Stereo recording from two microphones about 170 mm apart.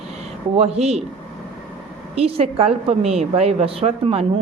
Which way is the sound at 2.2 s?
35° right (ahead or behind).